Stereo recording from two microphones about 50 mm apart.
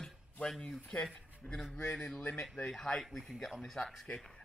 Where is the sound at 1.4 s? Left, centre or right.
Left.